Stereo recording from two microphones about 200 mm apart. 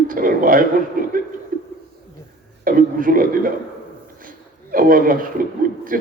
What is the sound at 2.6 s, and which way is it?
A man's voice, 45° right (ahead or behind).